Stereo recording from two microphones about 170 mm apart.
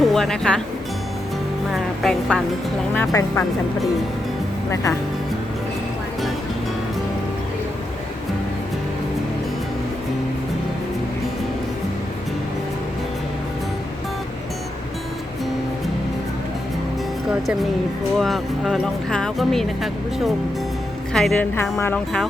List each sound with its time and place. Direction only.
0.0 s speech: centre (ahead or behind)
1.7 s speech: centre (ahead or behind)
2.9 s a woman's voice: 15° left (ahead or behind)
4.7 s a woman's voice: 15° left (ahead or behind)
18.2 s a woman's voice: centre (ahead or behind)